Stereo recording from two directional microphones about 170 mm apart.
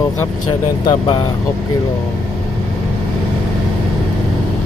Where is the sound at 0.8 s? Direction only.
25° left (ahead or behind).